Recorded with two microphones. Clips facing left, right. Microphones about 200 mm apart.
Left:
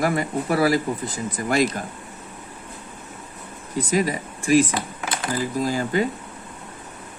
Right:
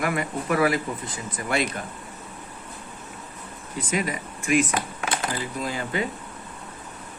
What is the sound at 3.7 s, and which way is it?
Speech, 35° left (ahead or behind).